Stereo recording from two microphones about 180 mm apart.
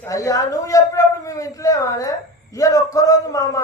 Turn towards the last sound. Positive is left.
turn(degrees=20)  # may be behind; listen again after turning